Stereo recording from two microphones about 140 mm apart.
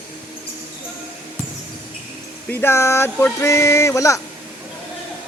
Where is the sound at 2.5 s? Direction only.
15° left (ahead or behind).